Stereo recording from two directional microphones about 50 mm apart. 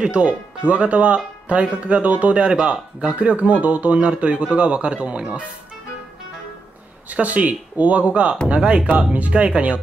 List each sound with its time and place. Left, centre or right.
0.0 s speech: right
7.1 s speech: right